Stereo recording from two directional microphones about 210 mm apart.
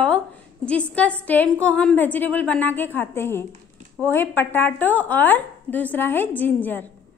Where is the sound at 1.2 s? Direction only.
5° left (ahead or behind).